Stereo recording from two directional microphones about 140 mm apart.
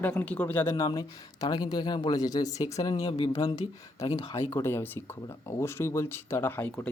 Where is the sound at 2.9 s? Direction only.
40° left (ahead or behind).